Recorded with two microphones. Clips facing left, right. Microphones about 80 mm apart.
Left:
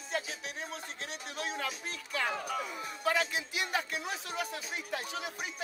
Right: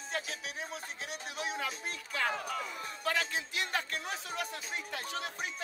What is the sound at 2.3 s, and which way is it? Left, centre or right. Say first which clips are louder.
Speech: left 1 dB; centre.